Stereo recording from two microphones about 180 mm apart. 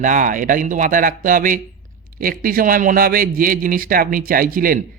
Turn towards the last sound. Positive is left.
turn(degrees=-50)  # may be behind; listen again after turning